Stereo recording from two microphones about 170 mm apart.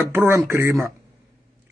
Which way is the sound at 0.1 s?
15° right (ahead or behind).